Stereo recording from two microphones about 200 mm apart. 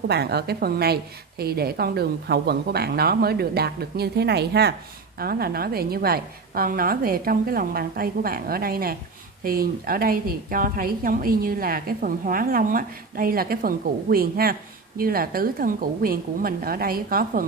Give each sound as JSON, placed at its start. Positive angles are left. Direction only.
{"t": 0.1, "sound": "a woman's voice", "side_deg": -55}